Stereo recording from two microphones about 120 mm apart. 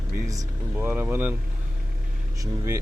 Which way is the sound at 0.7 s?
15° right (ahead or behind).